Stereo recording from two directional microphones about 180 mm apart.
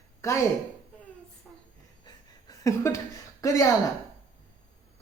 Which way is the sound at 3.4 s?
15° left (ahead or behind).